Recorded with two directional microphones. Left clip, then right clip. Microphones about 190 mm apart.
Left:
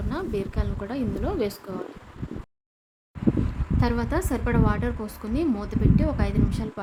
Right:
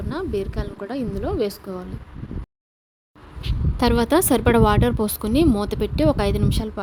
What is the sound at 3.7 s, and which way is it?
A woman's voice, 40° right (ahead or behind).